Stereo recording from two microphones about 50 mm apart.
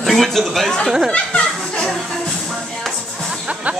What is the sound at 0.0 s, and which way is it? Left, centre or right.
Speech, centre.